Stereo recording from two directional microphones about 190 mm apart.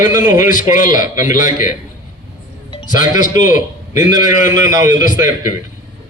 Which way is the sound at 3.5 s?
20° right (ahead or behind).